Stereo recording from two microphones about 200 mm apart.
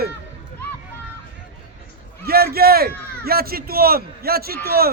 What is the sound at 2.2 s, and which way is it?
A man's voice, 50° right (ahead or behind).